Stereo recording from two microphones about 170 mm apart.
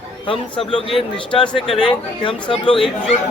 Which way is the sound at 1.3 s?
5° left (ahead or behind).